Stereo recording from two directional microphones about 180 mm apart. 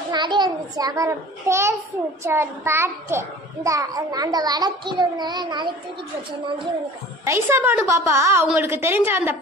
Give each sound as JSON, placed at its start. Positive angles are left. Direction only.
{"t": 0.1, "sound": "a child's voice", "side_deg": -25}
{"t": 7.2, "sound": "a woman's voice", "side_deg": -15}